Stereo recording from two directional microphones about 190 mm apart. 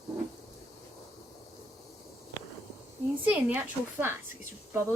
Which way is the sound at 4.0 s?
10° right (ahead or behind).